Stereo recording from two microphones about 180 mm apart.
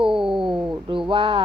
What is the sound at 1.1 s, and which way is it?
Speech, 30° right (ahead or behind).